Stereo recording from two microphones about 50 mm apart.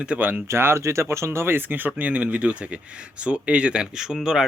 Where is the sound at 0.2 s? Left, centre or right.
Right.